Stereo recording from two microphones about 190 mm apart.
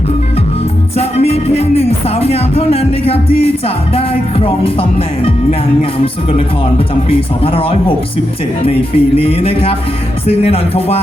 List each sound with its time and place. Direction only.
0.9 s speech: 30° left (ahead or behind)
7.1 s speech: 30° left (ahead or behind)